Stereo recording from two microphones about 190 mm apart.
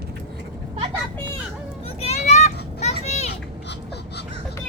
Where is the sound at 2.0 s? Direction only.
35° left (ahead or behind).